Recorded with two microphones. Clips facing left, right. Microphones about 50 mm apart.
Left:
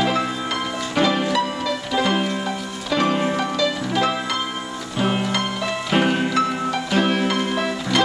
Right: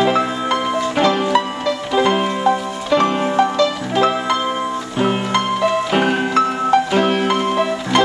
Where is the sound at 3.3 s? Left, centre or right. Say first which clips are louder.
Right 6 dB; right.